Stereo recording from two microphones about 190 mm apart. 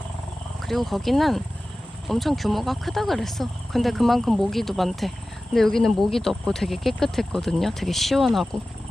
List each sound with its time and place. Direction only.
0.6 s speech: centre (ahead or behind)